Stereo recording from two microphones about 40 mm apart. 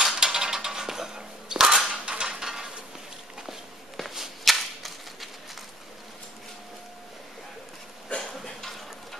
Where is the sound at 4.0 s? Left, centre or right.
Centre.